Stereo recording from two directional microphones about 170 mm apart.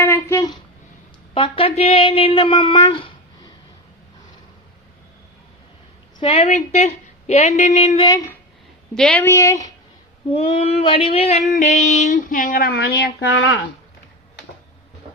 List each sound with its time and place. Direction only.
0.0 s a sound: 15° left (ahead or behind)
1.3 s a woman's voice: 35° left (ahead or behind)
6.1 s a woman's voice: 35° left (ahead or behind)
8.0 s speech: 20° left (ahead or behind)
9.0 s a woman's voice: 5° left (ahead or behind)
9.2 s speech: 15° left (ahead or behind)
10.3 s child singing: 35° left (ahead or behind); by 13.6 s 80° left